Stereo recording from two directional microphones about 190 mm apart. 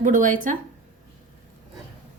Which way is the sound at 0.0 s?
45° right (ahead or behind).